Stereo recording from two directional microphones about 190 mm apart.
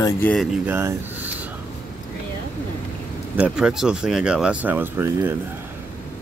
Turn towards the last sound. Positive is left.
turn(degrees=-10)  # may be behind; listen again after turning